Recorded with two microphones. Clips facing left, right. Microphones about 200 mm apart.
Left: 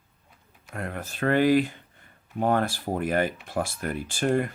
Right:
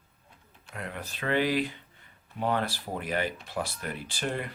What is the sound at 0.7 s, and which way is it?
Speech, 50° left (ahead or behind).